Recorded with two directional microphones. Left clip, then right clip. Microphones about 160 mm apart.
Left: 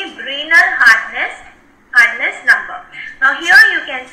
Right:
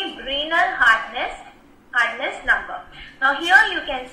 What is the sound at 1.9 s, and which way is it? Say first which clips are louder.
A woman's voice: left 10 dB; 5° left (ahead or behind).